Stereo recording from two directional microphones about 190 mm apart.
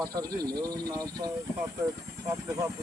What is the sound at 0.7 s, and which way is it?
Speech, 20° right (ahead or behind).